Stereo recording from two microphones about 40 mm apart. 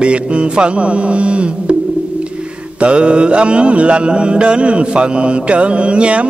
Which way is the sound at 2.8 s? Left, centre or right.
Right.